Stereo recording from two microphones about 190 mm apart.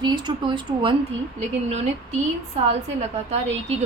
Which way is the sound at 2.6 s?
35° right (ahead or behind).